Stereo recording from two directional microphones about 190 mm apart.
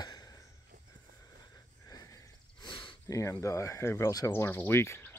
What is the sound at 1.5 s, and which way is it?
Speech, 20° left (ahead or behind).